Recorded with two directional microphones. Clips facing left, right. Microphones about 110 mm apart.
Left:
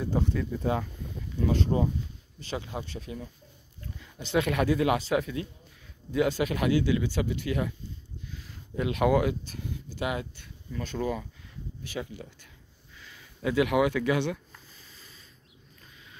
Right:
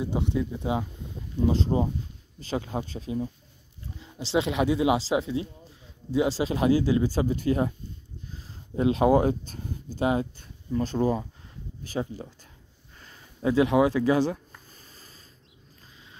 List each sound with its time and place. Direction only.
0.0 s speech: 20° right (ahead or behind)
2.4 s speech: 35° right (ahead or behind)
12.9 s a sound: 40° right (ahead or behind)